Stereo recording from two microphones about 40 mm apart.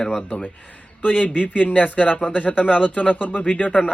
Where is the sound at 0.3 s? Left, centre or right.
Left.